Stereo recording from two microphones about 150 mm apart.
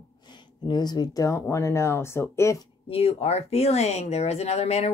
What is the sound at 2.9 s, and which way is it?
Speech, 40° left (ahead or behind).